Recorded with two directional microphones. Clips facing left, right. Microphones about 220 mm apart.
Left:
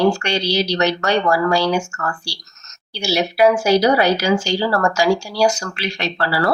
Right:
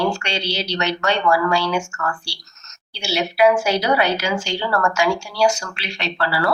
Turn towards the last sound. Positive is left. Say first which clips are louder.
# left 2 dB
turn(degrees=40)  # may be behind; listen again after turning